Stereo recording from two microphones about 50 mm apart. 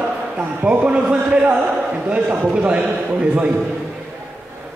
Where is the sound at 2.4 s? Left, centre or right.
Right.